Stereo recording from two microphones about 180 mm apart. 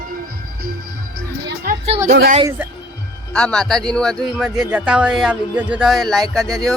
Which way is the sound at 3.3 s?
5° left (ahead or behind).